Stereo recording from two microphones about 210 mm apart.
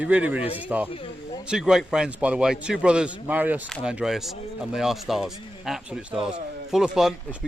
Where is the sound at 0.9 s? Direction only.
25° left (ahead or behind).